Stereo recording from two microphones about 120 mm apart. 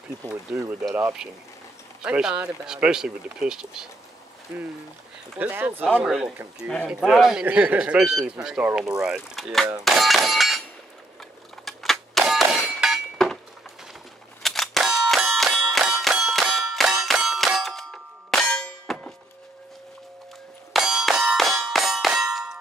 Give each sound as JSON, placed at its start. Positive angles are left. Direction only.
{"t": 0.5, "sound": "speech", "side_deg": -20}
{"t": 2.0, "sound": "speech", "side_deg": -5}
{"t": 5.4, "sound": "speech", "side_deg": -15}
{"t": 6.0, "sound": "speech", "side_deg": -5}
{"t": 11.6, "sound": "clang", "side_deg": 0}
{"t": 12.8, "sound": "a sound", "side_deg": 0}
{"t": 14.4, "sound": "a sound", "side_deg": 0}
{"t": 20.7, "sound": "clang", "side_deg": 0}